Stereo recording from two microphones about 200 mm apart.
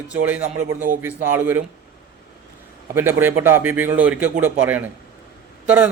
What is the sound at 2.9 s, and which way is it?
A man's voice, 10° right (ahead or behind).